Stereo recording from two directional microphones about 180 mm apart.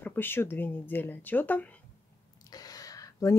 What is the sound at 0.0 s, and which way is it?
A woman's voice, 10° left (ahead or behind).